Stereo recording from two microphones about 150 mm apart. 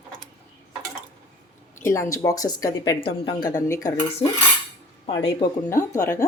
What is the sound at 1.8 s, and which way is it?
Speech, 20° left (ahead or behind).